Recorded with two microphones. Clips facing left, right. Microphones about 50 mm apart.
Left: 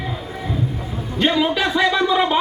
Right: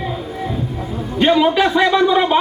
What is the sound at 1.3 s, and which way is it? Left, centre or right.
Speech, centre.